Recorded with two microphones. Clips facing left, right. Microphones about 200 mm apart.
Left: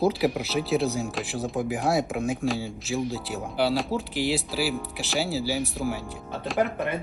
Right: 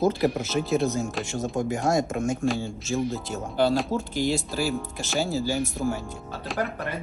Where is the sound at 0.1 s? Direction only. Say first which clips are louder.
Right 1 dB; centre (ahead or behind).